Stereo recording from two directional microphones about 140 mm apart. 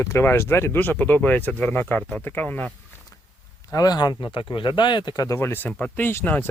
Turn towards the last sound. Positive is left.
turn(degrees=15)  # may be behind; listen again after turning